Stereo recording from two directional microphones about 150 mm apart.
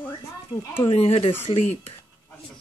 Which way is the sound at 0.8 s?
40° left (ahead or behind).